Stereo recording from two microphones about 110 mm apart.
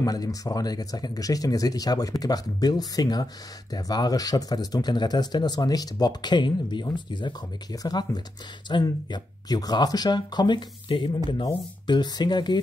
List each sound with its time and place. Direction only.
0.0 s speech: 35° left (ahead or behind)